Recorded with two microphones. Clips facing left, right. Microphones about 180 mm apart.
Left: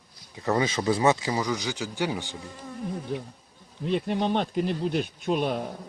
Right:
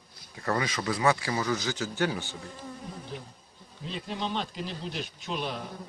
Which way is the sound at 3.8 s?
60° left (ahead or behind).